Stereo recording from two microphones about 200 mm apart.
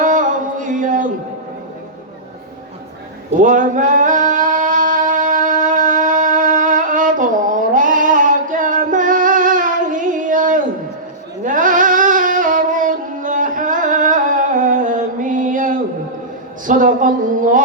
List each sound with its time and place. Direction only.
0.0 s music: 40° right (ahead or behind)
3.3 s singing: 40° right (ahead or behind)
11.4 s a sound: 40° right (ahead or behind)